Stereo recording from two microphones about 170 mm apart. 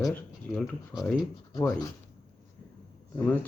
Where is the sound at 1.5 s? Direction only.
20° left (ahead or behind).